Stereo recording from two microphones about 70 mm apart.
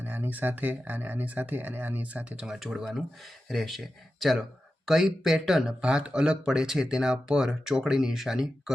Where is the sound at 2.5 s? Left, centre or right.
Centre.